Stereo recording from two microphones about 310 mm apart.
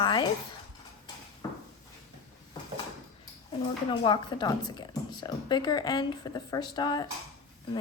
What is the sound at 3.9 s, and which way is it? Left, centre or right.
A woman's voice, centre.